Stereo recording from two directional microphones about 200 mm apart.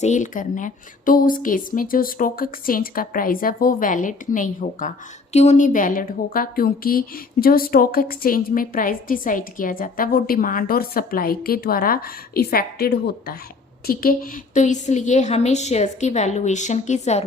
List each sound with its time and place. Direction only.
0.0 s a woman's voice: 35° left (ahead or behind)